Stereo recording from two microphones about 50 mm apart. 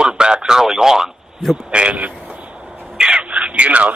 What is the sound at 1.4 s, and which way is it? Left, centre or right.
Speech, centre.